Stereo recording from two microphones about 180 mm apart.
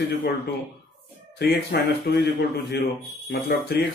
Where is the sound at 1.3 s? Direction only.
65° left (ahead or behind).